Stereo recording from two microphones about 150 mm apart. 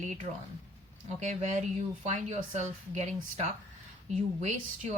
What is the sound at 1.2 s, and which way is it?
Speech, 50° right (ahead or behind).